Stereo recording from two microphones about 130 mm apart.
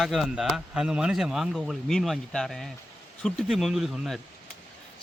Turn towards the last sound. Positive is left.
turn(degrees=0)  # may be behind; listen again after turning